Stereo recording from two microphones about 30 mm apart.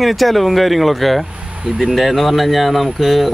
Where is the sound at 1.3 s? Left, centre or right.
Right.